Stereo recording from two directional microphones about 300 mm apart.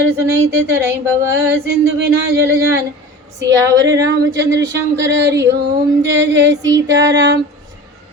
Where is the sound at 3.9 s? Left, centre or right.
Right.